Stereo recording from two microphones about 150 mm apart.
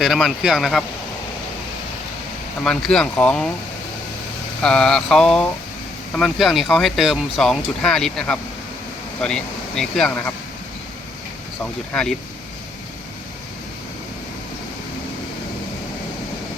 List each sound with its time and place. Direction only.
0.0 s speech: centre (ahead or behind)
2.6 s speech: 5° left (ahead or behind)
4.6 s speech: 5° left (ahead or behind)
11.6 s speech: 5° left (ahead or behind)